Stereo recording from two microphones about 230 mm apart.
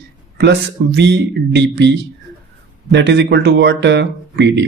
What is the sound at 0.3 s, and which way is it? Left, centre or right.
Speech, right.